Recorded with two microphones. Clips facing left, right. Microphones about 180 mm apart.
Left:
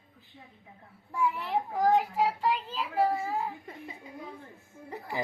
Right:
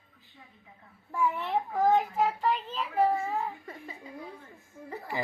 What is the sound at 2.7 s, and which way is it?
Child singing, 5° left (ahead or behind).